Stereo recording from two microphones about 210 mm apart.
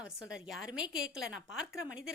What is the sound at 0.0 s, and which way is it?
A woman's voice, centre (ahead or behind).